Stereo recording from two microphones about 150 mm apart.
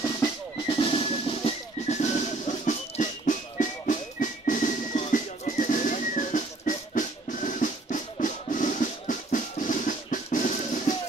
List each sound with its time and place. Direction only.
0.2 s music: 35° left (ahead or behind); by 11.0 s 55° left (ahead or behind)